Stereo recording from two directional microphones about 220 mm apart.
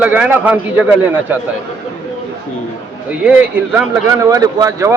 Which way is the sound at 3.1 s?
5° right (ahead or behind).